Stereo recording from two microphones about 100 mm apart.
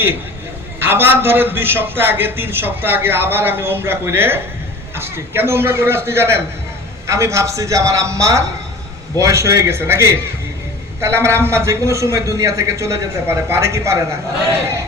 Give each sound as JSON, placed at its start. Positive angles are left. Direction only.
{"t": 0.8, "sound": "a man's voice", "side_deg": -20}